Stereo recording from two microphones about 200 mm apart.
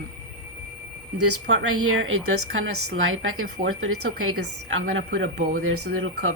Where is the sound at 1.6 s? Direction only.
85° right.